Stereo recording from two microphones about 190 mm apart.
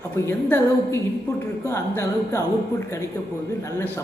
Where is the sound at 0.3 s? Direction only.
10° left (ahead or behind).